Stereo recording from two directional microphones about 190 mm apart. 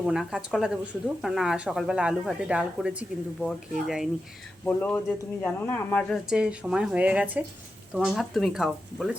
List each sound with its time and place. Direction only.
0.0 s speech: 5° right (ahead or behind)
4.6 s speech: 10° left (ahead or behind)
6.2 s speech: 5° right (ahead or behind)